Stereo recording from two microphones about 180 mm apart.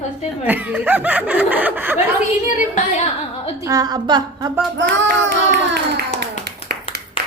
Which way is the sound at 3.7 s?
20° right (ahead or behind).